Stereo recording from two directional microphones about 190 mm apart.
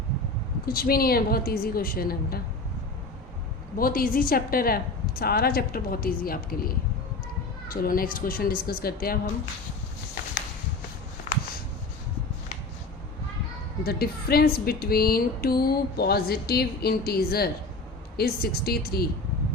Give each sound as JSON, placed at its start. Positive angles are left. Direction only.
{"t": 0.6, "sound": "speech", "side_deg": 50}
{"t": 3.8, "sound": "speech", "side_deg": 50}
{"t": 13.8, "sound": "speech", "side_deg": 55}